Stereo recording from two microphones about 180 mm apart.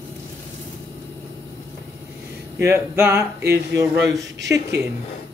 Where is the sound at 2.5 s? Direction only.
15° right (ahead or behind).